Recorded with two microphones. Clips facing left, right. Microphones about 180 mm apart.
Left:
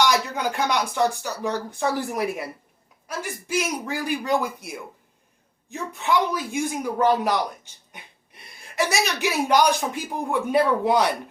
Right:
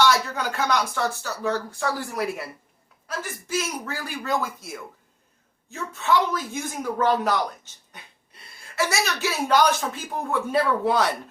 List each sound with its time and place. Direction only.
0.0 s speech: 15° left (ahead or behind)